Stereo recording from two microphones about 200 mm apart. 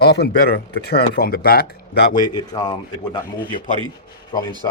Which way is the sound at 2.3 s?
20° left (ahead or behind).